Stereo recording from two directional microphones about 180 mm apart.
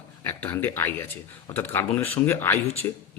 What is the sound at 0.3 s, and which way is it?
Speech, 10° left (ahead or behind).